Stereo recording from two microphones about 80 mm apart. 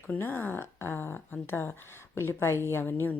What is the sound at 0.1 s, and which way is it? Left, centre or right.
A woman's voice, left.